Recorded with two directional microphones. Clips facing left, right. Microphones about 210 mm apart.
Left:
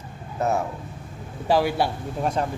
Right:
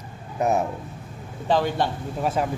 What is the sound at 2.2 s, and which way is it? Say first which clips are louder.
Speech: right 1 dB; 5° right (ahead or behind).